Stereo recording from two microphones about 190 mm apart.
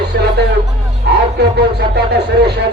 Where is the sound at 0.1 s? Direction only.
60° right (ahead or behind).